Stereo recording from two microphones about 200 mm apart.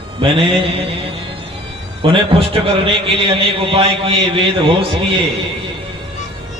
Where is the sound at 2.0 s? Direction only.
25° right (ahead or behind).